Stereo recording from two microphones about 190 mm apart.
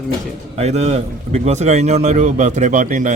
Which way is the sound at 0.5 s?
35° right (ahead or behind).